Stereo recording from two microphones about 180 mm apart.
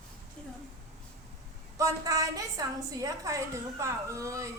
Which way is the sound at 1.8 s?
20° right (ahead or behind).